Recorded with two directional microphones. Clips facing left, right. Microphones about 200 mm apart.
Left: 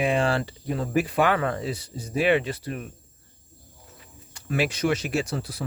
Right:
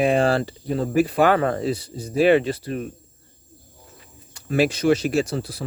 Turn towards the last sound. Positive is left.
turn(degrees=-30)  # may be behind; listen again after turning